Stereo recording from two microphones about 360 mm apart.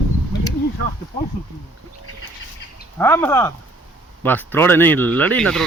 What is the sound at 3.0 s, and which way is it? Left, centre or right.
Speech, centre.